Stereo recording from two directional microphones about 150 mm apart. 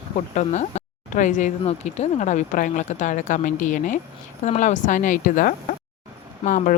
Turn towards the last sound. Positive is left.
turn(degrees=60)  # may be behind; listen again after turning